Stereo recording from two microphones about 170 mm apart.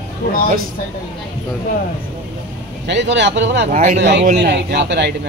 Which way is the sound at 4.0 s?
90° right.